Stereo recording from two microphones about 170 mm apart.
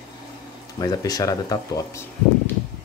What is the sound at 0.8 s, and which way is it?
Speech, 20° left (ahead or behind).